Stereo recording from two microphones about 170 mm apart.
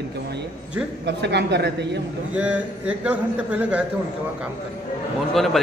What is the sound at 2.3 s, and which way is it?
A man's voice, 5° right (ahead or behind).